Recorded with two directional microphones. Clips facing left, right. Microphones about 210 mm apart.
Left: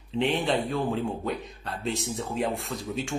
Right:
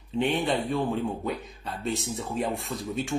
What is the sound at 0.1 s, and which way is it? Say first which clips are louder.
Speech: even; centre (ahead or behind).